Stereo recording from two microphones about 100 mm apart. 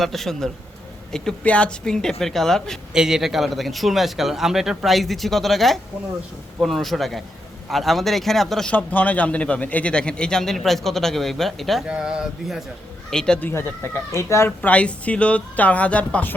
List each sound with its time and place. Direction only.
0.0 s a man's voice: centre (ahead or behind)
8.7 s a man's voice: 15° left (ahead or behind); by 12.6 s 5° right (ahead or behind)
13.1 s speech: 5° left (ahead or behind)
13.5 s speech: 20° left (ahead or behind)
14.6 s a man's voice: 15° left (ahead or behind)